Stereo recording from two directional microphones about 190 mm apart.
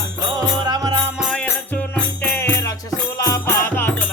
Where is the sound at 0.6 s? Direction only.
20° right (ahead or behind).